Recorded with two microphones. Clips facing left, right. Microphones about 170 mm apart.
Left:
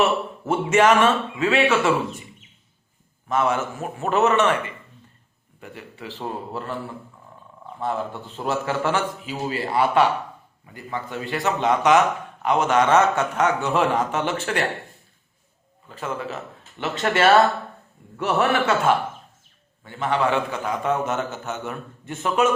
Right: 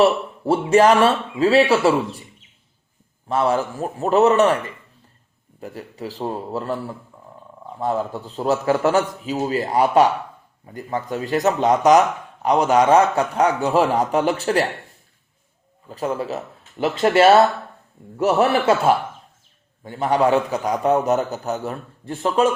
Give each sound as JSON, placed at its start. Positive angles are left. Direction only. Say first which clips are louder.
{"t": 0.0, "sound": "speech", "louder": "right 5 dB", "side_deg": -35}
{"t": 3.2, "sound": "speech", "louder": "right 3 dB", "side_deg": -35}
{"t": 15.9, "sound": "speech", "louder": "right 5 dB", "side_deg": -40}